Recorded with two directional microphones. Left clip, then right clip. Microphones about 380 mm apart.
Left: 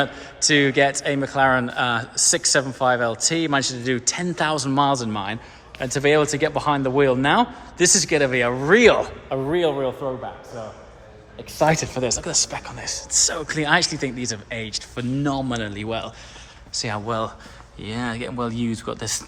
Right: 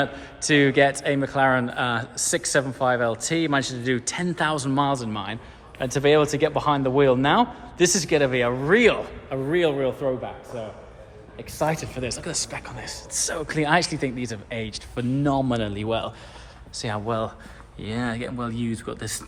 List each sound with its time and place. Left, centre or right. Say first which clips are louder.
0.0 s a man's voice: left 4 dB; centre
11.6 s speech: left 6 dB; left
12.0 s a man's voice: left 6 dB; centre